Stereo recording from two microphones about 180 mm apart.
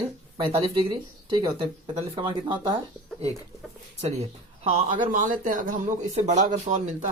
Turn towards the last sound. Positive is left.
turn(degrees=-40)  # may be behind; listen again after turning